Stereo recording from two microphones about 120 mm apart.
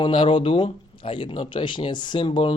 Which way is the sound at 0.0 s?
45° left (ahead or behind).